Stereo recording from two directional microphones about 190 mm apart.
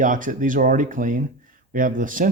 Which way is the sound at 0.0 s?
45° right (ahead or behind).